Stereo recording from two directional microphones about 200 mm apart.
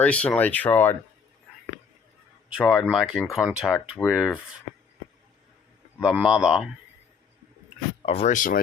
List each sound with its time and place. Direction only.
0.0 s speech: 5° left (ahead or behind)
2.6 s speech: centre (ahead or behind)
6.0 s speech: 5° right (ahead or behind)
8.0 s speech: 30° left (ahead or behind)